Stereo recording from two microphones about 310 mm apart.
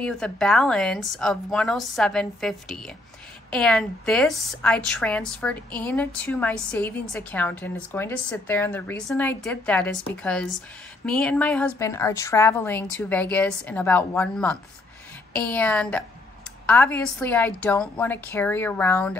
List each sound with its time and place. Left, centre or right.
0.0 s a woman's voice: centre